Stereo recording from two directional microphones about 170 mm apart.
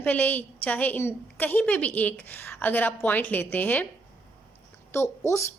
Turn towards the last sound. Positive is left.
turn(degrees=15)  # may be behind; listen again after turning